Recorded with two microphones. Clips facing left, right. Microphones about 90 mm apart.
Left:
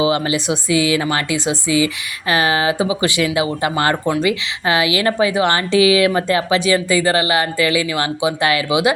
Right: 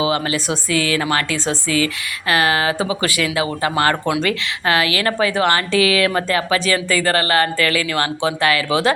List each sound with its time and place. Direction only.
0.0 s a woman's voice: 20° left (ahead or behind)